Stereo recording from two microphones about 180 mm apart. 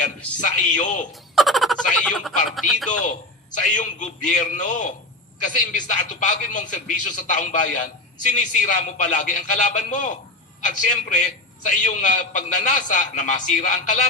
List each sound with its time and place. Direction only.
0.4 s a man's voice: 45° left (ahead or behind)
1.4 s speech: centre (ahead or behind)
3.6 s a man's voice: 45° left (ahead or behind)